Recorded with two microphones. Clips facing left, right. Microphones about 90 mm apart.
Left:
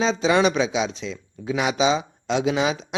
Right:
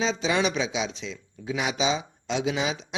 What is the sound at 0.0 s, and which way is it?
Speech, 45° left (ahead or behind).